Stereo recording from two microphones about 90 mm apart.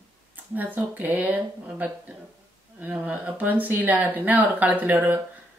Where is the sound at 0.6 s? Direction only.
20° right (ahead or behind).